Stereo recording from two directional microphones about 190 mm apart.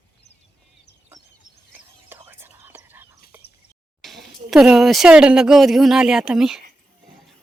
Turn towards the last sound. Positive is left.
turn(degrees=-5)  # may be behind; listen again after turning